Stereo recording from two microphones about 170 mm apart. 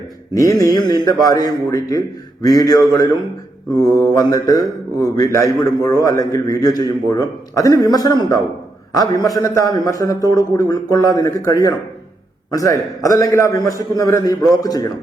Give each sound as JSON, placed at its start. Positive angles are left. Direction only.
{"t": 0.3, "sound": "a man's voice", "side_deg": 20}